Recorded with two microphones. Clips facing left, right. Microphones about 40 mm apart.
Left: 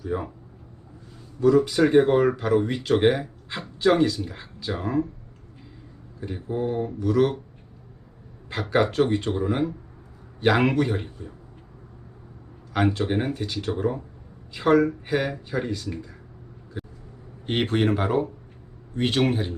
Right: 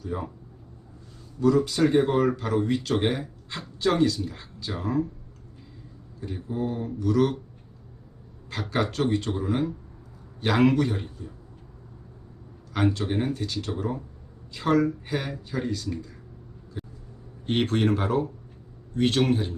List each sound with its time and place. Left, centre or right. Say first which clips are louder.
0.0 s speech: left 4 dB; centre
1.4 s speech: left 3 dB; centre
6.1 s speech: left 2 dB; centre
7.0 s speech: left 1 dB; centre
8.4 s speech: left 5 dB; centre
12.7 s speech: left 2 dB; centre
16.7 s vehicle: left 2 dB; centre
17.4 s speech: left 1 dB; centre